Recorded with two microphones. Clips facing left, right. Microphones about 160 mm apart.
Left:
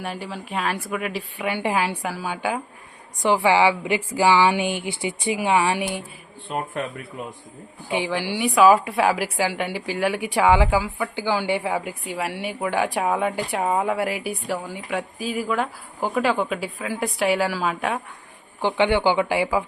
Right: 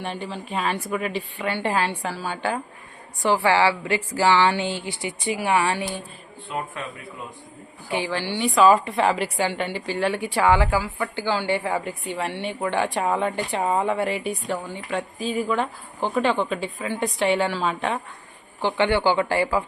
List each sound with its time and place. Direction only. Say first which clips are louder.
0.0 s a woman's voice: even; 5° left (ahead or behind)
7.9 s a woman's voice: left 1 dB; 15° left (ahead or behind)
18.6 s a woman's voice: left 1 dB; 15° left (ahead or behind)